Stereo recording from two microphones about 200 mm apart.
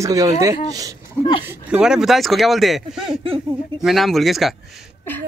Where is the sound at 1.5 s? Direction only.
5° right (ahead or behind).